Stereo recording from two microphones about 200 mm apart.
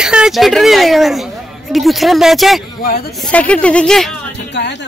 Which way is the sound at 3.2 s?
5° left (ahead or behind).